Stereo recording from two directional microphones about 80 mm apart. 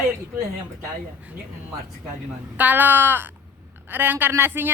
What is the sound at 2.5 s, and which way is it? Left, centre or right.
Speech, right.